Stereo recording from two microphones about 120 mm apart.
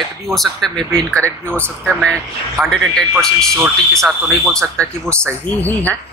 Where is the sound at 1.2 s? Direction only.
20° right (ahead or behind).